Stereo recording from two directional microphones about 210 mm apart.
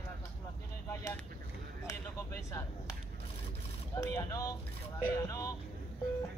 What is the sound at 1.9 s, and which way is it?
Speech, 15° left (ahead or behind).